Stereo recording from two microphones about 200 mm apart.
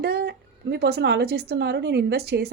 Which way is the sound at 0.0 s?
55° right (ahead or behind).